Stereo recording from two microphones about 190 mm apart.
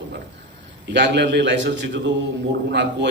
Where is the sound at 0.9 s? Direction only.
65° right (ahead or behind).